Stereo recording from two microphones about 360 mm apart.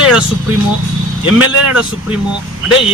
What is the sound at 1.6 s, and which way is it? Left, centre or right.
Speech, centre.